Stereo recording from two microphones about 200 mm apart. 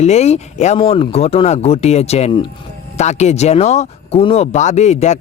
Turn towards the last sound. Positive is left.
turn(degrees=35)  # may be behind; listen again after turning